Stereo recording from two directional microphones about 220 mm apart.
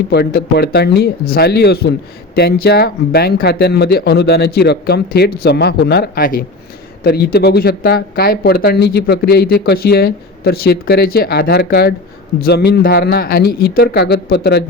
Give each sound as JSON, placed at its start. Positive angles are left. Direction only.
{"t": 0.1, "sound": "speech", "side_deg": 45}